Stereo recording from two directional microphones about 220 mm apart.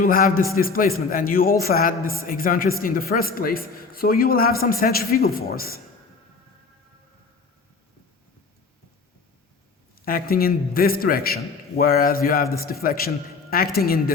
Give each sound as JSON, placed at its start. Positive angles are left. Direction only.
{"t": 0.0, "sound": "a man's voice", "side_deg": 40}
{"t": 10.1, "sound": "a man's voice", "side_deg": 40}